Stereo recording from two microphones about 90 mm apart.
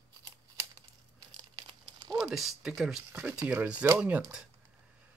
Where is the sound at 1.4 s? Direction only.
60° right (ahead or behind).